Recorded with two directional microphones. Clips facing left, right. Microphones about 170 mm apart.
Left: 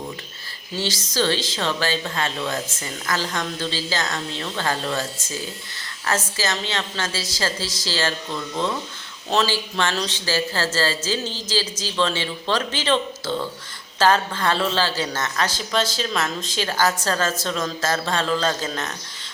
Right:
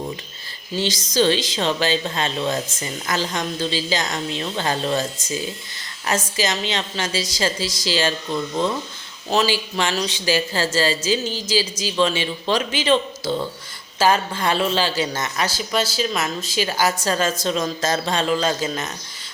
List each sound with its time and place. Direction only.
0.8 s speech: 15° right (ahead or behind)